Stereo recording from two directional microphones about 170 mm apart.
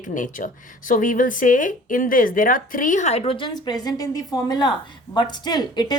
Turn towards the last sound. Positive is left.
turn(degrees=25)  # may be behind; listen again after turning